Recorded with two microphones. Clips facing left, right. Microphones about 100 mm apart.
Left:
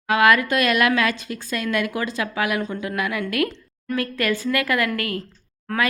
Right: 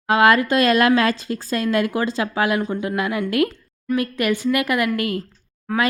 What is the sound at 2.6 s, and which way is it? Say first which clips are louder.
Speech: right 3 dB; 15° right (ahead or behind).